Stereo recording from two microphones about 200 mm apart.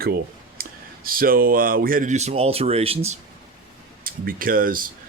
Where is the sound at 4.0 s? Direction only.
45° right (ahead or behind).